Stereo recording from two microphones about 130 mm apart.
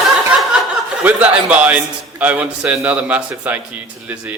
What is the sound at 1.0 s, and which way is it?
A man's voice, 10° right (ahead or behind).